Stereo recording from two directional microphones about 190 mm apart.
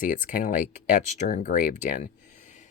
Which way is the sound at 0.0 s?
45° left (ahead or behind).